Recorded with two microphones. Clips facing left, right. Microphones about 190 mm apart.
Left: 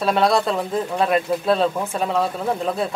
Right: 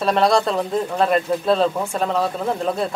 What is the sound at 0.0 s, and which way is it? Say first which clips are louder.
Speech: right 1 dB; centre (ahead or behind).